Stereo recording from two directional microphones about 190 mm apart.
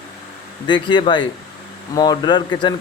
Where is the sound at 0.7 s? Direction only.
25° left (ahead or behind).